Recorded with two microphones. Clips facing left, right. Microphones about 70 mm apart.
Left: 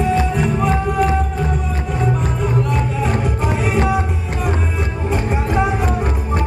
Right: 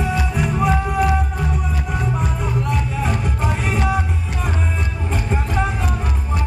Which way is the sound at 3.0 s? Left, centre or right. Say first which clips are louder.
Left 3 dB; centre.